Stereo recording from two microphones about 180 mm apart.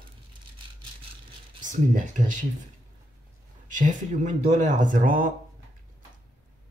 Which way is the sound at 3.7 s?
45° right (ahead or behind).